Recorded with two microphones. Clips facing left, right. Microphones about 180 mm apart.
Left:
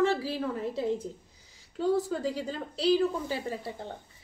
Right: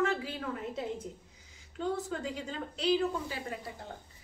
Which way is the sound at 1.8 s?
35° left (ahead or behind).